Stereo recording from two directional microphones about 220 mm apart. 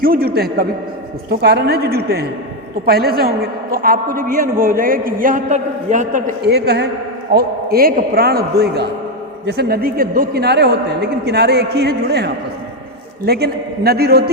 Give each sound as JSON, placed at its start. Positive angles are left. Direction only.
{"t": 0.0, "sound": "a man's voice", "side_deg": -40}